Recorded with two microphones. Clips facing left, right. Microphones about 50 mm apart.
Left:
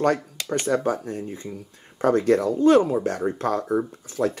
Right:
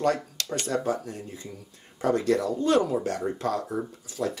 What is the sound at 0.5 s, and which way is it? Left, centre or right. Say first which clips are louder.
Speech: left 5 dB; left.